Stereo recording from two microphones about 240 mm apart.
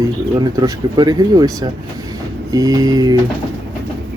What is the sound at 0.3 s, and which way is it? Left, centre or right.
Speech, centre.